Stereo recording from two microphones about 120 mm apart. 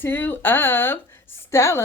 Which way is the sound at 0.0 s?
15° left (ahead or behind).